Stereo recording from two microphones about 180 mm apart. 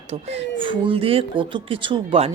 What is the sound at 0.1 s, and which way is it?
Speech, 35° right (ahead or behind).